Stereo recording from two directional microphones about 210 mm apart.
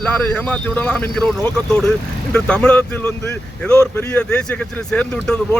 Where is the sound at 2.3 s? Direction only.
5° left (ahead or behind).